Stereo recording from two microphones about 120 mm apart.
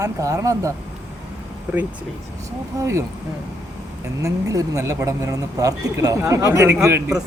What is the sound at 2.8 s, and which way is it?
Speech, 25° right (ahead or behind).